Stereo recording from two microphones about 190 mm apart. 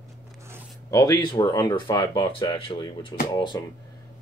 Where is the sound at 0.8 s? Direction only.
20° left (ahead or behind).